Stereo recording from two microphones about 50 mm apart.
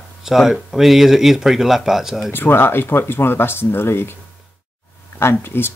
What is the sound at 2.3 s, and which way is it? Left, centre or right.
Speech, left.